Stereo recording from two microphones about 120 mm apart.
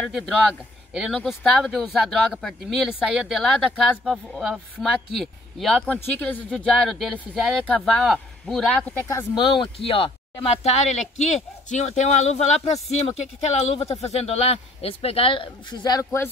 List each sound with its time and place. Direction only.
0.0 s speech: centre (ahead or behind)
6.5 s speech: 5° left (ahead or behind)
7.6 s speech: 15° left (ahead or behind)
8.0 s speech: centre (ahead or behind)
9.3 s speech: 45° left (ahead or behind); by 16.3 s 25° left (ahead or behind)